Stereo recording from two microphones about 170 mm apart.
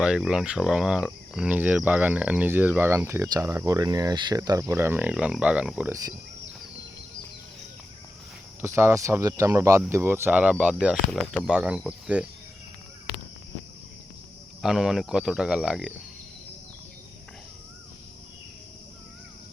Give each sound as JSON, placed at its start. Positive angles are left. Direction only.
{"t": 0.0, "sound": "speech", "side_deg": -5}
{"t": 8.6, "sound": "speech", "side_deg": -15}
{"t": 14.6, "sound": "speech", "side_deg": -5}